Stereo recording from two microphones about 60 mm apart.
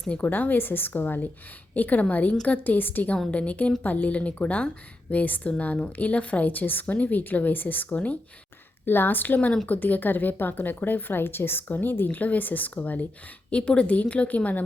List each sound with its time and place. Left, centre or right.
0.2 s a woman's voice: left
8.9 s a woman's voice: left